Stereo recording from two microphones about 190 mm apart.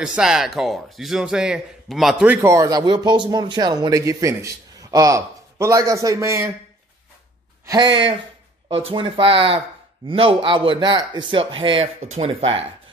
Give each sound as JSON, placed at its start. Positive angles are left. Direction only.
{"t": 0.0, "sound": "a man's voice", "side_deg": -5}
{"t": 7.6, "sound": "a man's voice", "side_deg": -20}